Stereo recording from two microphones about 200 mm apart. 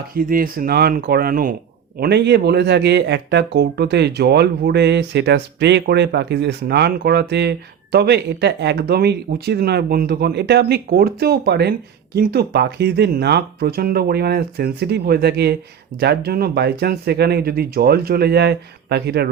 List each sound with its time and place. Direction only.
0.2 s speech: 45° right (ahead or behind)
2.0 s speech: 55° right (ahead or behind)